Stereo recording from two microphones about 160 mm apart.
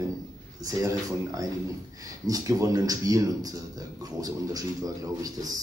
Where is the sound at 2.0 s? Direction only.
20° right (ahead or behind).